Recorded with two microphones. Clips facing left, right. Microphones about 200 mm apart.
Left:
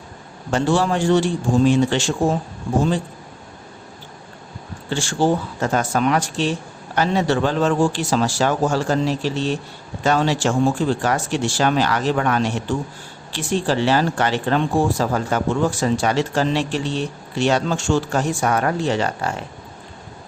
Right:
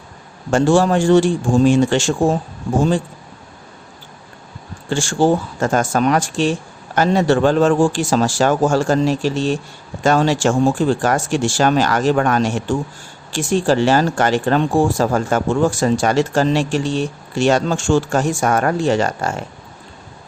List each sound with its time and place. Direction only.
0.5 s speech: 45° right (ahead or behind)
4.9 s speech: 45° right (ahead or behind)